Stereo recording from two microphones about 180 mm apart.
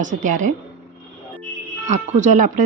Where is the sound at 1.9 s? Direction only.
45° right (ahead or behind).